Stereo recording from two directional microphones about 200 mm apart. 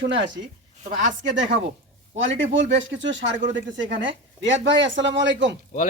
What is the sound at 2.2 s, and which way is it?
A man's voice, 65° right (ahead or behind).